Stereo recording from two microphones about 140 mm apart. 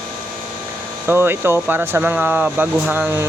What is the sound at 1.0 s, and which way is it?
Speech, 15° right (ahead or behind).